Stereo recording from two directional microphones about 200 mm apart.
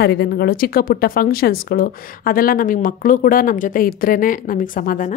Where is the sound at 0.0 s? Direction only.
50° left (ahead or behind).